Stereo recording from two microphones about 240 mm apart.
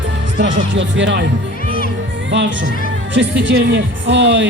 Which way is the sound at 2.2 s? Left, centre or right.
Right.